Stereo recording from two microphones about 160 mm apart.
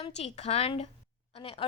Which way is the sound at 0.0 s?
40° left (ahead or behind).